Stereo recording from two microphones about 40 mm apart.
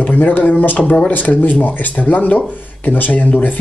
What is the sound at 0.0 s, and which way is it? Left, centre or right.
Speech, left.